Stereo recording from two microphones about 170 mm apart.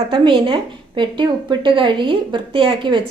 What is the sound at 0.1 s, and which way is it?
A woman's voice, 30° right (ahead or behind).